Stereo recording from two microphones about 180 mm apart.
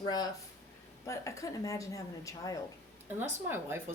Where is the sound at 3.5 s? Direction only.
15° right (ahead or behind).